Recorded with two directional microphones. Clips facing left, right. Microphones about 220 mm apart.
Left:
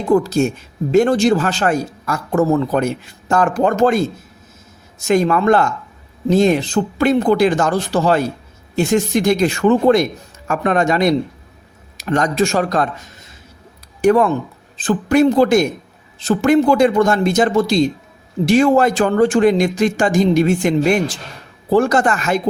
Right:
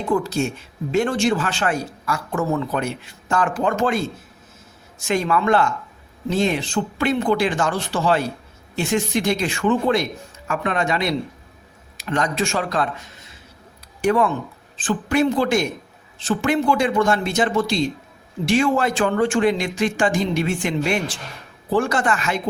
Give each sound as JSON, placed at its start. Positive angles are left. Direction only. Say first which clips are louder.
{"t": 0.1, "sound": "speech", "louder": "left 7 dB", "side_deg": 40}